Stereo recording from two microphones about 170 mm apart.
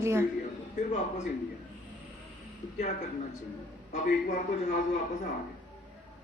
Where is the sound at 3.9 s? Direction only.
50° left (ahead or behind).